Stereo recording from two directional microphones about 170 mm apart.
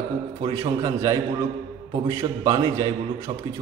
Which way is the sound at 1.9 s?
30° right (ahead or behind).